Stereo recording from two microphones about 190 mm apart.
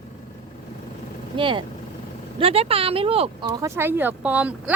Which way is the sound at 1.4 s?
25° right (ahead or behind).